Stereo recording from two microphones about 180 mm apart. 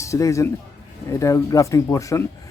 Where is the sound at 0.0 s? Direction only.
15° left (ahead or behind).